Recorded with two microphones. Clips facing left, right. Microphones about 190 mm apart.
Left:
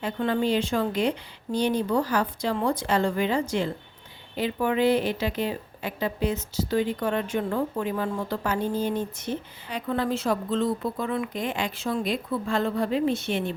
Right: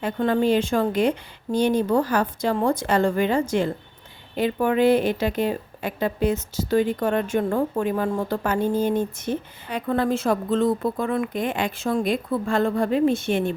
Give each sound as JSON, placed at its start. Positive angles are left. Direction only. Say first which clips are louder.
{"t": 0.0, "sound": "a woman's voice", "louder": "right 4 dB", "side_deg": -45}